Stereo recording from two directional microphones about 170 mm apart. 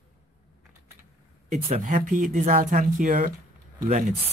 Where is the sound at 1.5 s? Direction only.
50° right (ahead or behind).